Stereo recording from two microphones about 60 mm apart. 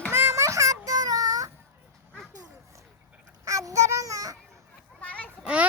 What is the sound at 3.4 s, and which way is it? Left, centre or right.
Child singing, right.